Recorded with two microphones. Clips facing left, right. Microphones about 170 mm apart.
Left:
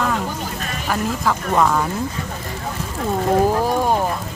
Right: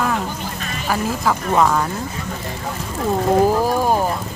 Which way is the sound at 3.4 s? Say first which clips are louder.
Right 1 dB; 5° right (ahead or behind).